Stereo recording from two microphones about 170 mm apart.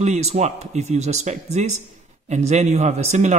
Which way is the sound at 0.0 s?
40° right (ahead or behind).